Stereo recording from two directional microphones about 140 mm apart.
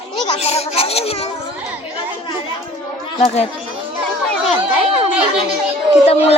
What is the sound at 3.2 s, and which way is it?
Speech, 45° left (ahead or behind).